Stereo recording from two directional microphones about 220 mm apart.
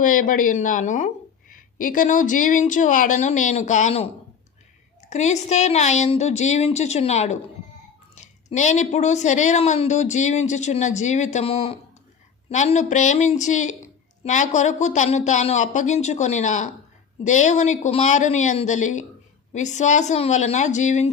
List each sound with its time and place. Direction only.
0.0 s a woman's voice: 35° left (ahead or behind)